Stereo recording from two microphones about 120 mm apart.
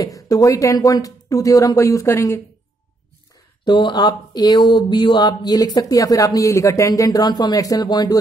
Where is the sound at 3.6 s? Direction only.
40° left (ahead or behind).